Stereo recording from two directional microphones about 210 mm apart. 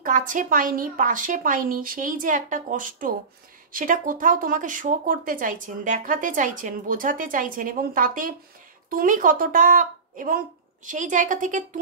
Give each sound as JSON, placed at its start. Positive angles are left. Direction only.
{"t": 0.0, "sound": "speech", "side_deg": -40}